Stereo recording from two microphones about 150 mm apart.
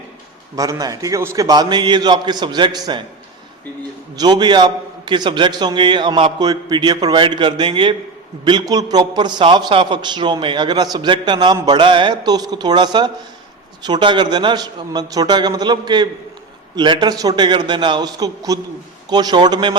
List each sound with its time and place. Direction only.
0.5 s a man's voice: 25° right (ahead or behind)
4.1 s a man's voice: 30° right (ahead or behind)